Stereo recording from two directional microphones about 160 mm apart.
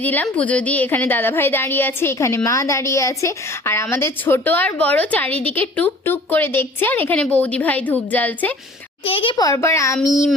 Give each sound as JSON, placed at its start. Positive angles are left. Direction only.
{"t": 0.0, "sound": "a woman's voice", "side_deg": 10}
{"t": 9.0, "sound": "a child's voice", "side_deg": 35}
{"t": 9.4, "sound": "speech", "side_deg": 20}